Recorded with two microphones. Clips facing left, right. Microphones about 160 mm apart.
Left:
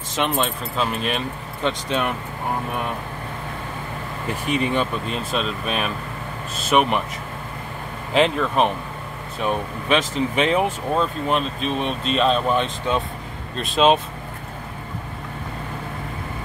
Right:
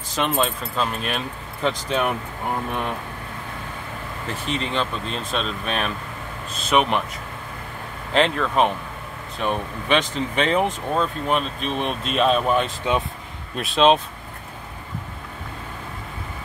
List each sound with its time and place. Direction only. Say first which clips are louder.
0.1 s speech: even; centre (ahead or behind)
4.3 s speech: left 5 dB; 10° left (ahead or behind)
8.1 s speech: left 1 dB; 5° left (ahead or behind)